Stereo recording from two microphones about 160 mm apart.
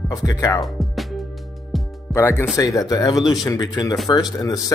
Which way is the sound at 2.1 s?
15° left (ahead or behind).